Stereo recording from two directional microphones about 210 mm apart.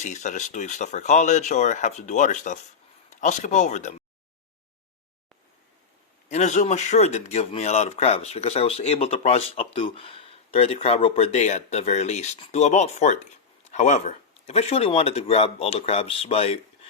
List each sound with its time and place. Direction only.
0.0 s speech: 35° left (ahead or behind)
6.2 s speech: 35° left (ahead or behind)